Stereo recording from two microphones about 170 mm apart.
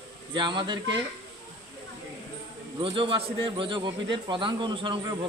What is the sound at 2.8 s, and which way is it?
A man's voice, 30° right (ahead or behind).